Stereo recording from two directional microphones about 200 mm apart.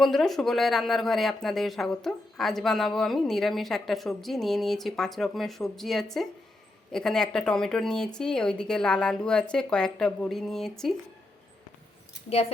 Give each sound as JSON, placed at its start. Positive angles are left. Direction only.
{"t": 0.0, "sound": "speech", "side_deg": 0}